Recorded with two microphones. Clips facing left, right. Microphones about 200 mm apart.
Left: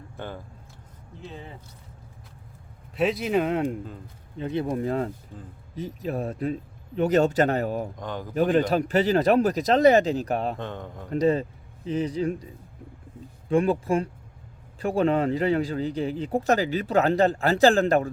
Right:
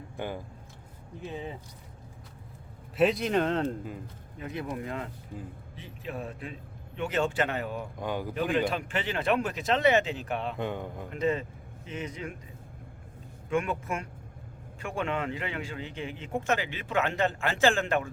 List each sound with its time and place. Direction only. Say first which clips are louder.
0.2 s speech: right 2 dB; 15° right (ahead or behind)
2.9 s speech: left 1 dB; centre (ahead or behind)
4.4 s speech: left 8 dB; 30° left (ahead or behind)
7.9 s speech: right 1 dB; 10° right (ahead or behind)
8.4 s speech: left 8 dB; 40° left (ahead or behind)
10.6 s speech: right 2 dB; 10° right (ahead or behind)
11.1 s speech: left 7 dB; 35° left (ahead or behind)
13.5 s speech: left 8 dB; 35° left (ahead or behind)